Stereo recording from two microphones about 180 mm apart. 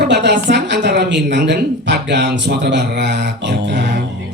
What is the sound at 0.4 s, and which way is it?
Speech, 70° right (ahead or behind).